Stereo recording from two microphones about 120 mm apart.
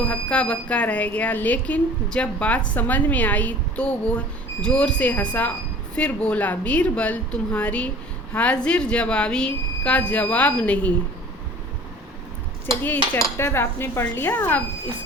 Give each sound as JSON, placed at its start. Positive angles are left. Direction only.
{"t": 0.1, "sound": "speech", "side_deg": 10}
{"t": 12.8, "sound": "speech", "side_deg": 20}